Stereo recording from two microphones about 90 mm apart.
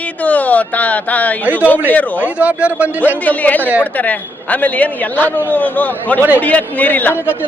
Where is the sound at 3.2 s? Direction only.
20° left (ahead or behind).